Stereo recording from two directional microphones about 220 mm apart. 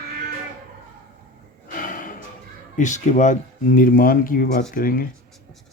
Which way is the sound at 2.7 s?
35° left (ahead or behind).